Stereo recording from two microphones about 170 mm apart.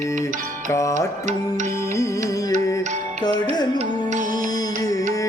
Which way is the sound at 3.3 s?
25° left (ahead or behind).